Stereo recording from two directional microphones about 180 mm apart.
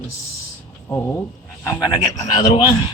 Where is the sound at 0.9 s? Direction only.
15° left (ahead or behind).